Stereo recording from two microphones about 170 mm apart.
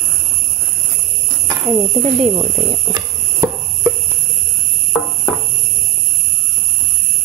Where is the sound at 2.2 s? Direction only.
30° right (ahead or behind).